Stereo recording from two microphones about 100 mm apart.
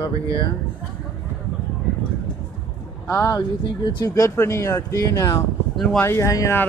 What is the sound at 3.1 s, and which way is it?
Speech, 30° left (ahead or behind).